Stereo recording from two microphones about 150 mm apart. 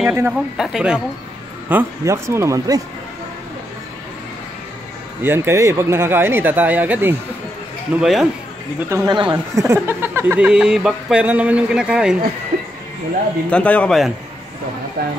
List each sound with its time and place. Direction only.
0.0 s speech: 10° right (ahead or behind)
1.7 s speech: 15° right (ahead or behind)
5.2 s speech: 15° right (ahead or behind)
8.0 s speech: 5° right (ahead or behind)
8.8 s speech: 20° right (ahead or behind)
9.1 s a woman's voice: 30° right (ahead or behind)
9.8 s speech: 15° right (ahead or behind)
13.5 s speech: 10° left (ahead or behind)
15.0 s speech: 90° right